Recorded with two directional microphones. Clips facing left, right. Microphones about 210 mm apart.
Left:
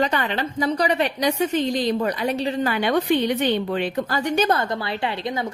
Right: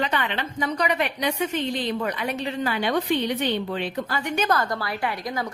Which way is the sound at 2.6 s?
55° left (ahead or behind).